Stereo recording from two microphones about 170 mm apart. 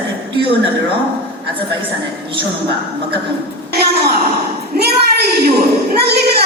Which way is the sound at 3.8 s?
65° right (ahead or behind).